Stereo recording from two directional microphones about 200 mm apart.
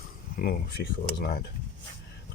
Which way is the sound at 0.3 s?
45° left (ahead or behind).